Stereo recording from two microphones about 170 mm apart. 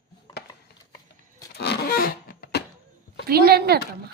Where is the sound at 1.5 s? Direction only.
70° left (ahead or behind).